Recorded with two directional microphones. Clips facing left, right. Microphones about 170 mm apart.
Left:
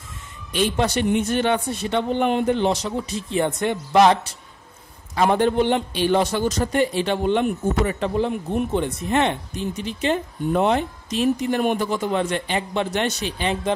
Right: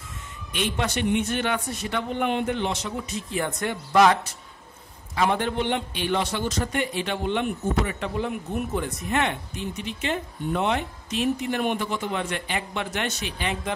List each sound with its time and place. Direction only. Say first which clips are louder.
0.5 s a man's voice: left 6 dB; 35° left (ahead or behind)
5.1 s a man's voice: left 6 dB; 40° left (ahead or behind)